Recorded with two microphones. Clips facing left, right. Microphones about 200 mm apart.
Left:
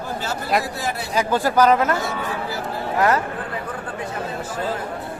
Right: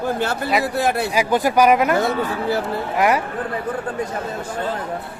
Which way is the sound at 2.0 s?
60° right (ahead or behind).